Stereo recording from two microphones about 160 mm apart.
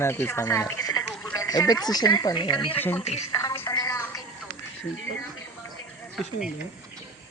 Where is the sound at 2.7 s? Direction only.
10° left (ahead or behind).